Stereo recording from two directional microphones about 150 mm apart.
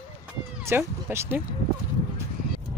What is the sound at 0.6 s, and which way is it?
Speech, 15° right (ahead or behind).